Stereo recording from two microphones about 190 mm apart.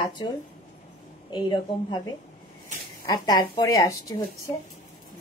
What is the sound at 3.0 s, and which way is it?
A woman's voice, 20° left (ahead or behind).